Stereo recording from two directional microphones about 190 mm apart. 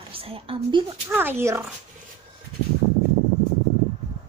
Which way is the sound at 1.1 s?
10° right (ahead or behind).